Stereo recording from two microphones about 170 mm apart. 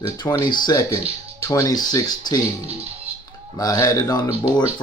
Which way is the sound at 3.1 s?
35° right (ahead or behind).